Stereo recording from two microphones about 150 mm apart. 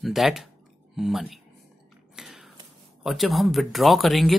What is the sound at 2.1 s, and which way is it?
Whispering, centre (ahead or behind).